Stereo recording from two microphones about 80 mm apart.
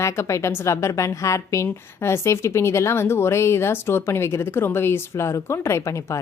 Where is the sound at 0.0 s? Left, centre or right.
Left.